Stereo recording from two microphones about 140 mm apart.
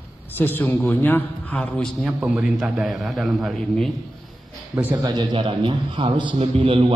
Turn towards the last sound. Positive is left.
turn(degrees=-40)  # may be behind; listen again after turning